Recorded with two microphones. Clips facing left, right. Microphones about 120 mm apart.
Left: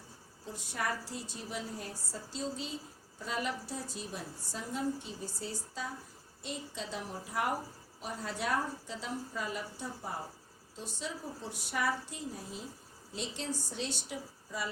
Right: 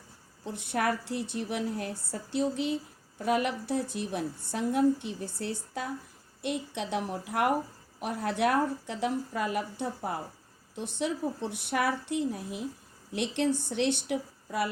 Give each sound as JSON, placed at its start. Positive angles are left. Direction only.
{"t": 0.4, "sound": "a woman's voice", "side_deg": -60}